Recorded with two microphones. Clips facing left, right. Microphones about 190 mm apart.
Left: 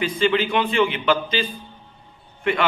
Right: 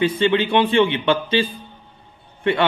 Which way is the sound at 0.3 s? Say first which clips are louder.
Right 4 dB; 30° right (ahead or behind).